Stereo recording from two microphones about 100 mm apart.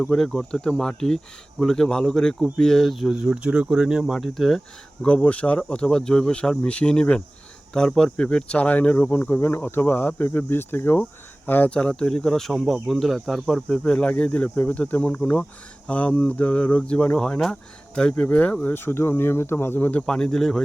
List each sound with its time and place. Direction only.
0.0 s speech: 10° left (ahead or behind)
20.1 s speech: 5° left (ahead or behind)